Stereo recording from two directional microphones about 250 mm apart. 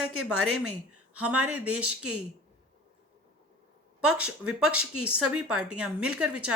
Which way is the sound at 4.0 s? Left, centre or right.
Right.